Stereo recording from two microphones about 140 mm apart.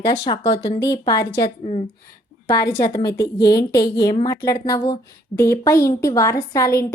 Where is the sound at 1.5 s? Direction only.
50° left (ahead or behind).